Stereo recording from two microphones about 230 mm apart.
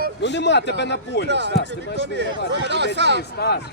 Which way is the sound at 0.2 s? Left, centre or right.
Left.